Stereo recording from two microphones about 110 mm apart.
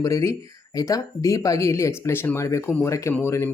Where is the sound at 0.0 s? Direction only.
30° left (ahead or behind).